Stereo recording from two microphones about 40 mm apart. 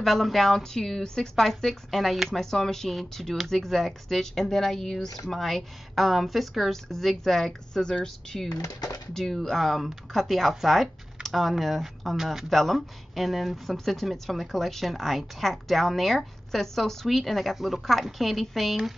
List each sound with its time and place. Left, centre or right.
0.0 s speech: centre
7.7 s speech: centre